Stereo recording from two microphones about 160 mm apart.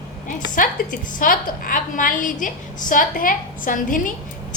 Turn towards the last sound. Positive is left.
turn(degrees=55)  # may be behind; listen again after turning